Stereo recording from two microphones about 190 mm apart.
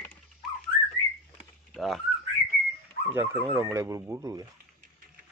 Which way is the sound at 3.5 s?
15° right (ahead or behind).